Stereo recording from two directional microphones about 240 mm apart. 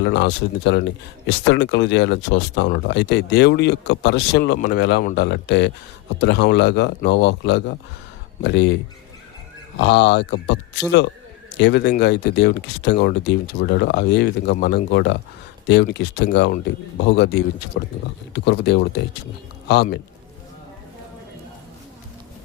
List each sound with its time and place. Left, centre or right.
0.0 s speech: left